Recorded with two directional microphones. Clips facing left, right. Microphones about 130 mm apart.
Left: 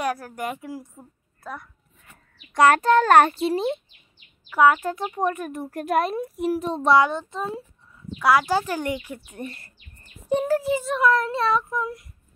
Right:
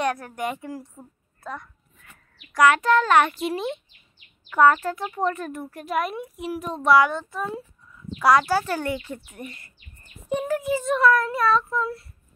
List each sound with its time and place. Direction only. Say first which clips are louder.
0.0 s a woman's voice: right 1 dB; 5° left (ahead or behind)
0.9 s a sound: right 1 dB; 5° left (ahead or behind)
2.7 s speech: left 2 dB; 30° left (ahead or behind)
3.0 s speech: left 3 dB; 45° left (ahead or behind)
4.5 s speech: even; 5° left (ahead or behind)
4.8 s speech: left 1 dB; 20° left (ahead or behind)
5.7 s a woman's voice: left 5 dB; 45° left (ahead or behind)
6.6 s a child's voice: right 1 dB; 30° left (ahead or behind)
8.2 s a woman's voice: right 1 dB; 5° left (ahead or behind)
8.5 s speech: even; 15° left (ahead or behind)
9.4 s speech: left 3 dB; 35° left (ahead or behind)
11.0 s speech: right 1 dB; 25° left (ahead or behind)